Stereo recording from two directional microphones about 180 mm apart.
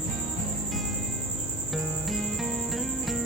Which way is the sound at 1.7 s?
Centre (ahead or behind).